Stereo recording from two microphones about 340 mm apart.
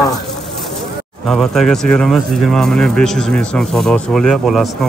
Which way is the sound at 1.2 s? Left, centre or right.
Centre.